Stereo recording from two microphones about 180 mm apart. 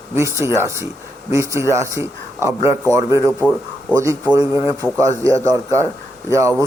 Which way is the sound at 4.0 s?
20° right (ahead or behind).